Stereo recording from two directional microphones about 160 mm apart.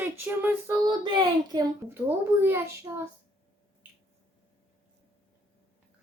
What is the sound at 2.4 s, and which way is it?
Speech, 15° right (ahead or behind).